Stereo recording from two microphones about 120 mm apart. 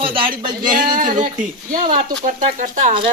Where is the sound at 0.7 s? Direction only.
90° right.